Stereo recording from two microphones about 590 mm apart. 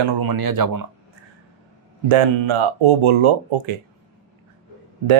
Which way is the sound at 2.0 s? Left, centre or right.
Right.